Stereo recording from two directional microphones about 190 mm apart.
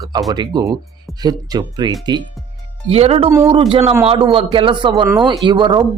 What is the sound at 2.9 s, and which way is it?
Speech, 35° right (ahead or behind).